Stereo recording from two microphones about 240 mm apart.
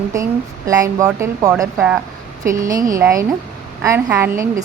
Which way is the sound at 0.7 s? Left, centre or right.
Centre.